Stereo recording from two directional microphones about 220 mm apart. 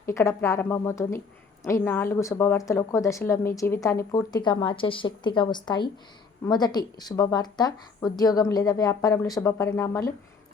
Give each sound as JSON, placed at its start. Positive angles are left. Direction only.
{"t": 0.0, "sound": "a woman's voice", "side_deg": 15}